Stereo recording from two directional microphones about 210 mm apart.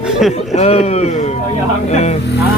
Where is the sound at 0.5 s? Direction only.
30° left (ahead or behind).